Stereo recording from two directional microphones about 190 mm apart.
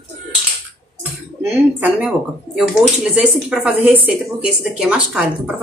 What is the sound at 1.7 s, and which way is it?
Speech, 10° right (ahead or behind).